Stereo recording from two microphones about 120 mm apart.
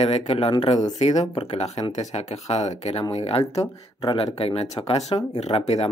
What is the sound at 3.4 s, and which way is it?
Speech, 30° left (ahead or behind).